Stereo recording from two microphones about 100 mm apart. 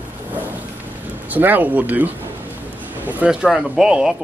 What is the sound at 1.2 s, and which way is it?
Speech, 15° right (ahead or behind).